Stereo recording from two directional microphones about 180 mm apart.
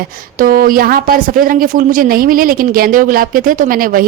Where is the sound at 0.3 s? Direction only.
55° right (ahead or behind).